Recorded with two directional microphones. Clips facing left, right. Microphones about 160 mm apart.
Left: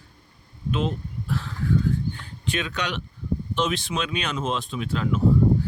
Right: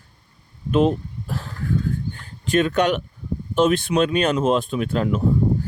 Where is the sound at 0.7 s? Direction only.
50° right (ahead or behind).